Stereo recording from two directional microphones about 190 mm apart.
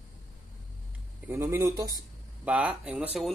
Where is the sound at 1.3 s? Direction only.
15° right (ahead or behind).